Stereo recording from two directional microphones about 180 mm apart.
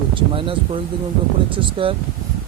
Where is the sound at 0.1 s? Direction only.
30° right (ahead or behind).